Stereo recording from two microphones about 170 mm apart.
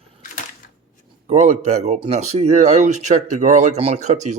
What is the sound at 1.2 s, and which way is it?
Speech, 40° right (ahead or behind).